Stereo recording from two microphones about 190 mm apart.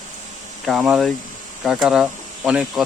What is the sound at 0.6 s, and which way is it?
Speech, 5° right (ahead or behind).